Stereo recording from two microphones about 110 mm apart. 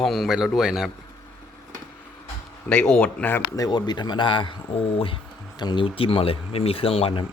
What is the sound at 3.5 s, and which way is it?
Speech, 35° left (ahead or behind).